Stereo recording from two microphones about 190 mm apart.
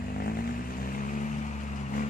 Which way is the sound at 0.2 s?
50° left (ahead or behind).